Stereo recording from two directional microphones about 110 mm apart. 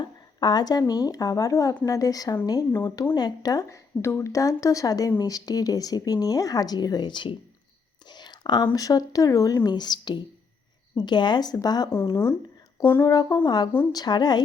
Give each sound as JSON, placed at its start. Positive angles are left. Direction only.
{"t": 0.0, "sound": "speech", "side_deg": 40}
{"t": 8.0, "sound": "whispering", "side_deg": 40}
{"t": 8.7, "sound": "speech", "side_deg": 35}
{"t": 12.1, "sound": "speech", "side_deg": 25}
{"t": 13.1, "sound": "speech", "side_deg": 35}